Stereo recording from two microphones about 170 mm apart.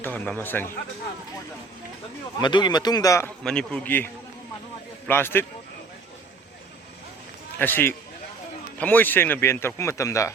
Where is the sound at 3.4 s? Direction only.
5° left (ahead or behind).